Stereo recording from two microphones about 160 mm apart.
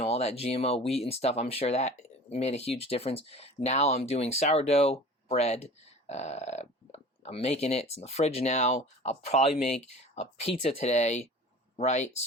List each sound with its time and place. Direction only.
0.0 s speech: 40° left (ahead or behind)